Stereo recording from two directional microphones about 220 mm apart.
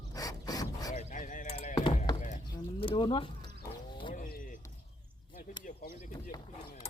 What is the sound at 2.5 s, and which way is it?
Bird, 20° left (ahead or behind).